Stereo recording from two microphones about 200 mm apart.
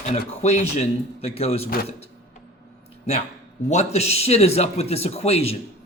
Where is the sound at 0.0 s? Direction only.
35° left (ahead or behind).